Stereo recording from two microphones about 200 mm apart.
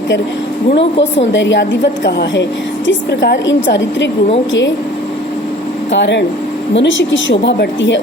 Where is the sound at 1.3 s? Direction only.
65° left (ahead or behind).